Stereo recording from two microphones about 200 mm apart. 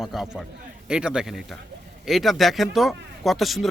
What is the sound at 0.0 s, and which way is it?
Speech, centre (ahead or behind).